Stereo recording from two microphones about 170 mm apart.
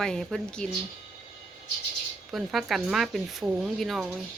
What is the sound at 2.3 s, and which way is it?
Speech, centre (ahead or behind).